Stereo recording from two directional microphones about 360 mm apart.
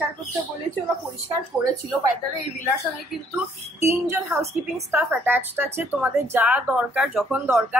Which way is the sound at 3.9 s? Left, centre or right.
Centre.